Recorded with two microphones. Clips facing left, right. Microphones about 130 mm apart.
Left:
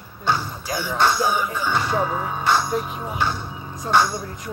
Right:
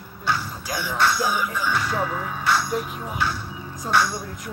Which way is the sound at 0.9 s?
25° left (ahead or behind).